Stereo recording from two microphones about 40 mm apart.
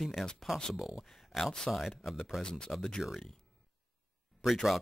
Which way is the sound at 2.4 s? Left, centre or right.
Centre.